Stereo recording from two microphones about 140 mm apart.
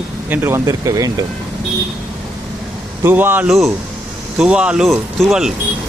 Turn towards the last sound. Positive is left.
turn(degrees=0)  # may be behind; listen again after turning